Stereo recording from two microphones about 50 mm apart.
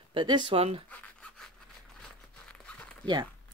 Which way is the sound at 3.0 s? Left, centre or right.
Left.